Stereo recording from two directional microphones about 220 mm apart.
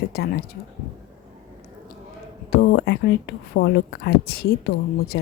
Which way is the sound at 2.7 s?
50° left (ahead or behind).